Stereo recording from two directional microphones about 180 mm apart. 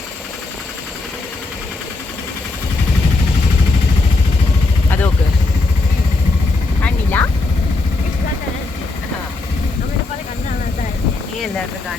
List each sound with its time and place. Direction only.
4.9 s vehicle: 10° left (ahead or behind)
6.8 s vehicle: 10° left (ahead or behind)